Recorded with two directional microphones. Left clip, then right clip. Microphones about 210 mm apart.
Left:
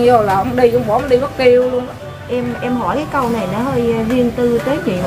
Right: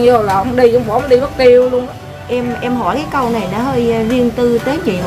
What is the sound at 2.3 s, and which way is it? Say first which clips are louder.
A woman's voice: right 2 dB; 50° right (ahead or behind).